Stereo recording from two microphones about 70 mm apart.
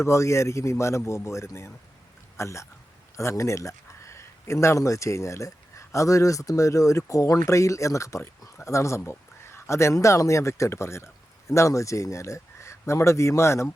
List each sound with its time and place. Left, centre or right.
0.0 s a man's voice: left